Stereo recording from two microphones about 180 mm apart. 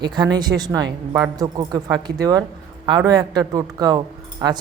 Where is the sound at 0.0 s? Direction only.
25° right (ahead or behind).